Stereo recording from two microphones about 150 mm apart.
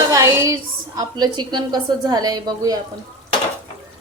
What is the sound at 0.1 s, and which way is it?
A woman's voice, 20° right (ahead or behind).